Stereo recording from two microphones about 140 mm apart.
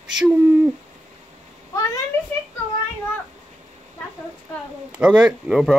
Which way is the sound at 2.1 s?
15° left (ahead or behind).